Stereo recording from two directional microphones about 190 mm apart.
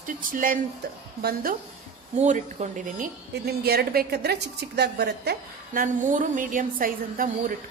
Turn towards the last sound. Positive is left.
turn(degrees=-45)  # may be behind; listen again after turning